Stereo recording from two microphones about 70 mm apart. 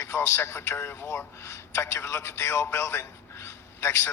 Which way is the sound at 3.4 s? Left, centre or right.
Left.